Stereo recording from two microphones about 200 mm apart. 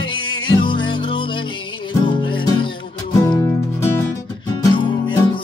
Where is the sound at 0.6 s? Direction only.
25° left (ahead or behind).